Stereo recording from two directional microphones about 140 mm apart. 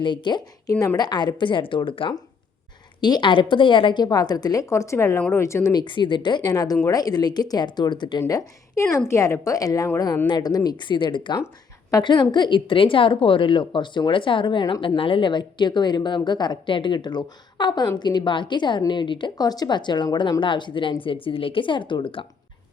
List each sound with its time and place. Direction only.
0.0 s a woman's voice: 35° left (ahead or behind)
5.8 s a woman's voice: 35° left (ahead or behind)
8.2 s a woman's voice: 25° left (ahead or behind)